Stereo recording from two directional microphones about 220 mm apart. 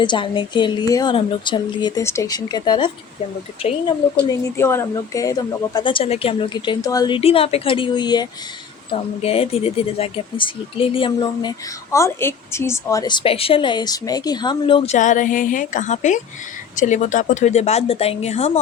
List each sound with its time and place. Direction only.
0.0 s speech: 20° left (ahead or behind)
4.3 s speech: 15° left (ahead or behind)
14.9 s a woman's voice: 35° left (ahead or behind)